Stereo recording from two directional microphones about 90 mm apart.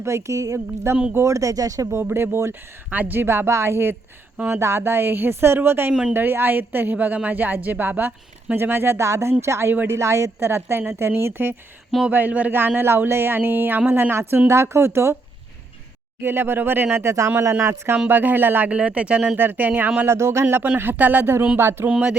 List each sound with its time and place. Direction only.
0.0 s a woman's voice: 30° right (ahead or behind)
2.0 s speech: 25° right (ahead or behind)
5.9 s speech: 10° right (ahead or behind)
6.1 s speech: 25° right (ahead or behind)
16.2 s speech: 25° right (ahead or behind)
21.9 s speech: 10° right (ahead or behind)